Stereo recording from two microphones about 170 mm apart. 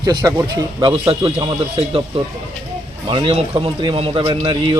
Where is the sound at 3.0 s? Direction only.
30° right (ahead or behind).